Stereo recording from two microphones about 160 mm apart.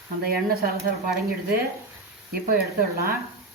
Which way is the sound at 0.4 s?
70° right (ahead or behind).